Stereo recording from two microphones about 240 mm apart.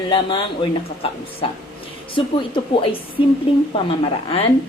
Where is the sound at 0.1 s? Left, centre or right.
Centre.